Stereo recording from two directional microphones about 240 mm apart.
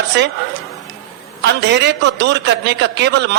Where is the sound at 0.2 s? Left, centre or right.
Right.